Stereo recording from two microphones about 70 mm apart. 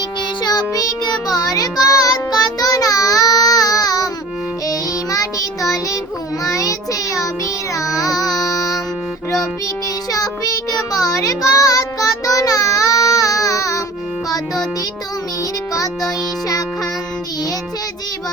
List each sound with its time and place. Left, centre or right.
0.4 s music: left
4.6 s child singing: left
8.4 s music: left
10.1 s child singing: left
15.7 s music: left